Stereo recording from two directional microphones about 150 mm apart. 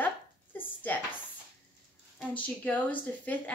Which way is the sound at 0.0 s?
10° left (ahead or behind).